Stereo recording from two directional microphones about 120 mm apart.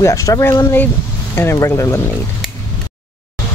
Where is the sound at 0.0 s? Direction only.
25° left (ahead or behind).